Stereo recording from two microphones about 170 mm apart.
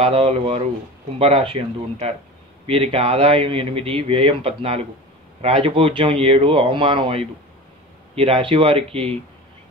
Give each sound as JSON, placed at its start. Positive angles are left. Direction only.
{"t": 0.0, "sound": "a man's voice", "side_deg": -35}